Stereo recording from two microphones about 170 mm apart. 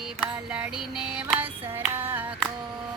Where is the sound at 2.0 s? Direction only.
10° right (ahead or behind).